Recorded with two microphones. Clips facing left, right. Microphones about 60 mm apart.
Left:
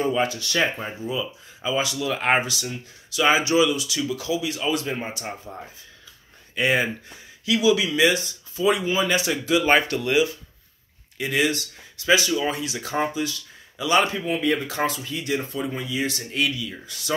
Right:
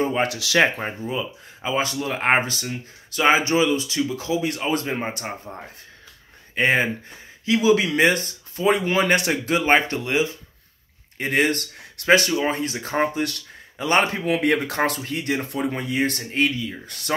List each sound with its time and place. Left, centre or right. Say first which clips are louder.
0.2 s speech: right 4 dB; right
0.7 s speech: right 2 dB; right
4.4 s speech: right 2 dB; right
5.1 s speech: right 1 dB; right
9.7 s speech: right 2 dB; right
11.1 s speech: right 2 dB; right
14.2 s speech: right 3 dB; right
16.3 s speech: right 3 dB; right
16.8 s speech: even; right